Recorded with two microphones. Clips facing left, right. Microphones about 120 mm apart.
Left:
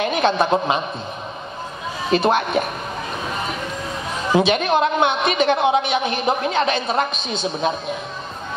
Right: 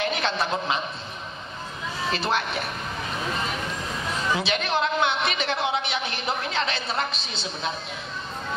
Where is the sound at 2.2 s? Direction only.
50° left (ahead or behind).